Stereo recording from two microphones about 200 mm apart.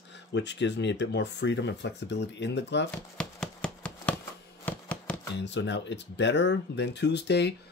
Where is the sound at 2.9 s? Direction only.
5° left (ahead or behind).